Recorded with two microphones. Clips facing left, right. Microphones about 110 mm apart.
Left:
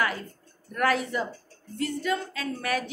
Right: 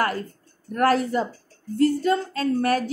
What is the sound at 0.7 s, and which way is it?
A woman's voice, 40° right (ahead or behind).